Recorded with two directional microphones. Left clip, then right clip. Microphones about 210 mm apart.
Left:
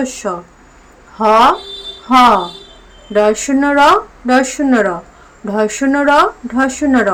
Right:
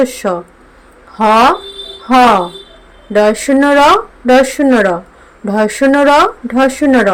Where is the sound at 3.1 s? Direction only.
15° right (ahead or behind).